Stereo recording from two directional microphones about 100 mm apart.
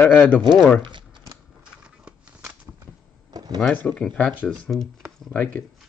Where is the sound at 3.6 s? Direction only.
15° left (ahead or behind).